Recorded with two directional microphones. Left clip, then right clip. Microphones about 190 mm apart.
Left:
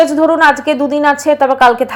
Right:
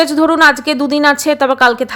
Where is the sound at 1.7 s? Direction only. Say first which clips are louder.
Left 3 dB; 15° right (ahead or behind).